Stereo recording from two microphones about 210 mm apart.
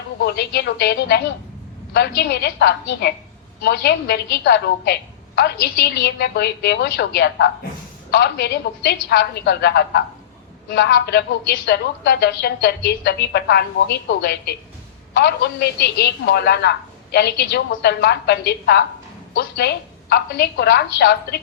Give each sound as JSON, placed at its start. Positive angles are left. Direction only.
{"t": 0.3, "sound": "a woman's voice", "side_deg": 50}